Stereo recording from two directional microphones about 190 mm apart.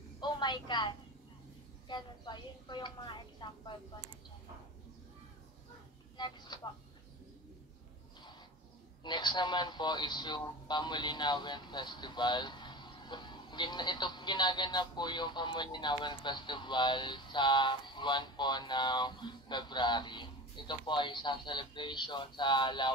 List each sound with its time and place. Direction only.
0.2 s a sound: 25° left (ahead or behind)
1.9 s a man's voice: 25° left (ahead or behind)
6.1 s a man's voice: 25° left (ahead or behind)
9.0 s a man's voice: 25° left (ahead or behind)